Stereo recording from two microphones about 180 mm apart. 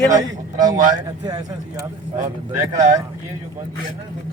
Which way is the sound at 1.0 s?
20° right (ahead or behind).